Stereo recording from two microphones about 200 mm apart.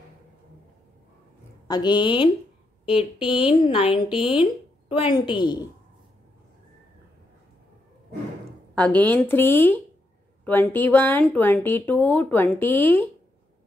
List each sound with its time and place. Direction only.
1.7 s a woman's voice: 20° left (ahead or behind)
3.4 s a woman's voice: 25° left (ahead or behind)
8.7 s speech: 10° left (ahead or behind)